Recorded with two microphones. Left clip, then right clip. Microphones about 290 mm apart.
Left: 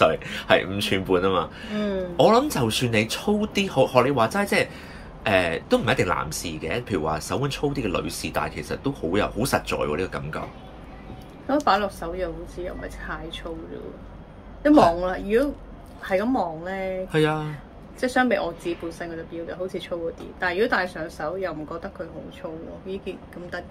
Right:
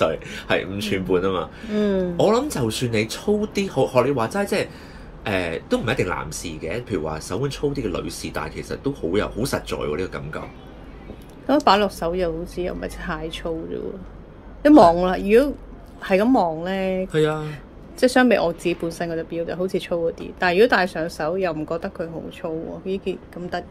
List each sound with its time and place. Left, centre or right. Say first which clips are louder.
0.0 s speech: left 2 dB; centre
1.8 s speech: right 6 dB; right
2.1 s speech: left 4 dB; centre
11.4 s speech: right 4 dB; right
14.6 s speech: right 5 dB; right
17.1 s speech: even; centre
18.0 s speech: right 5 dB; right